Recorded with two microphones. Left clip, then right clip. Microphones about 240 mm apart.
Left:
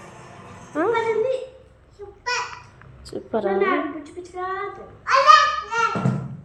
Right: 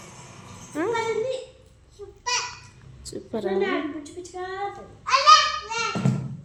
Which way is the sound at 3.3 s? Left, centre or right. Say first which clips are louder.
Left 4 dB; centre.